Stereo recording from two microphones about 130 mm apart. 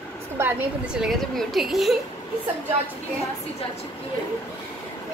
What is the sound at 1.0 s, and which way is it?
Speech, centre (ahead or behind).